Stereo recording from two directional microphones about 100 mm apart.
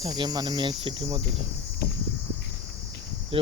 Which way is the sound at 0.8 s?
60° right (ahead or behind).